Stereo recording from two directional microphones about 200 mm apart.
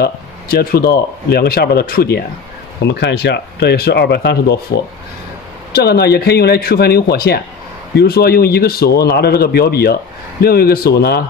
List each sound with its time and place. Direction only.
0.0 s speech: 50° left (ahead or behind)
5.8 s speech: 50° left (ahead or behind)